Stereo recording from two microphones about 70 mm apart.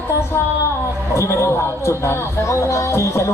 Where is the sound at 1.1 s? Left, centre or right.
Left.